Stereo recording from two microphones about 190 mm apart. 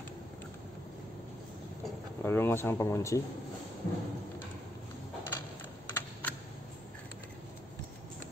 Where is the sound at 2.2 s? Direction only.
10° left (ahead or behind).